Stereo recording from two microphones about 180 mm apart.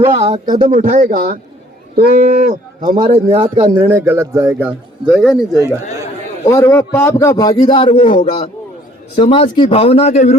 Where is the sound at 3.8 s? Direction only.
15° right (ahead or behind).